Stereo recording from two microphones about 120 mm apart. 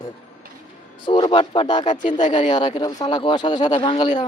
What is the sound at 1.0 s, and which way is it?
Speech, 40° left (ahead or behind).